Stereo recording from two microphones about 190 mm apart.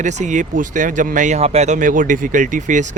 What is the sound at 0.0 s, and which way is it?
Speech, 40° right (ahead or behind).